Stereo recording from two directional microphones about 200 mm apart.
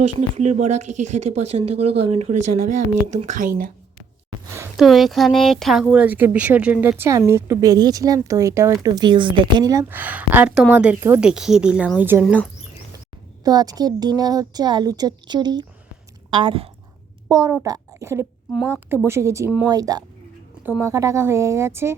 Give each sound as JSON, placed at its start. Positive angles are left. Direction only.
{"t": 0.2, "sound": "speech", "side_deg": -35}
{"t": 4.8, "sound": "speech", "side_deg": 0}
{"t": 12.2, "sound": "speech", "side_deg": 0}
{"t": 13.4, "sound": "a woman's voice", "side_deg": -20}